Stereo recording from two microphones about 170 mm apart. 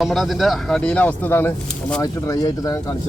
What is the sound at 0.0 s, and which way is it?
Speech, centre (ahead or behind).